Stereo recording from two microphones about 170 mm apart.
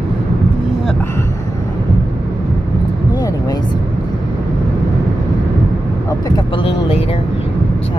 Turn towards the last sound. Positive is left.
turn(degrees=35)  # may be behind; listen again after turning